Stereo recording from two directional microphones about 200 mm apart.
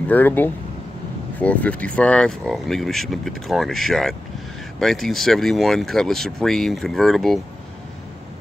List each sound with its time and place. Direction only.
0.1 s speech: 10° left (ahead or behind)